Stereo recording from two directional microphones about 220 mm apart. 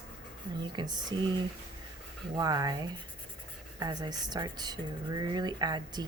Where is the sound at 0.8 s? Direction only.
20° right (ahead or behind).